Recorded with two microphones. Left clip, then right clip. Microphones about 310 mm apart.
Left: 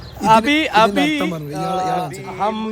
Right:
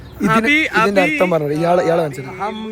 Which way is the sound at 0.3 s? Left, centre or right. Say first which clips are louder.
Left 1 dB; centre.